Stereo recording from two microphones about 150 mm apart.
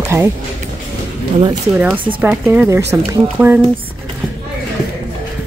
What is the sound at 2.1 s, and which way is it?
Speech, 10° right (ahead or behind).